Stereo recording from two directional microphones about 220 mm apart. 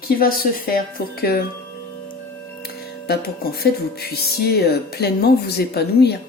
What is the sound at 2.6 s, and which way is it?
Music, 45° left (ahead or behind).